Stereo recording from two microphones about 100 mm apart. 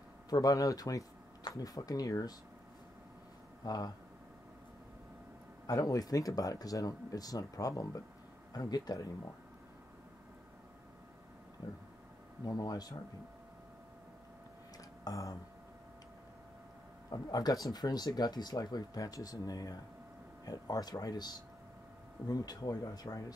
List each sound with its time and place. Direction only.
0.3 s speech: 35° left (ahead or behind)
3.6 s speech: 40° left (ahead or behind)
5.7 s speech: 35° left (ahead or behind)
12.4 s speech: 40° left (ahead or behind)
15.0 s speech: 35° left (ahead or behind)
17.1 s speech: 40° left (ahead or behind)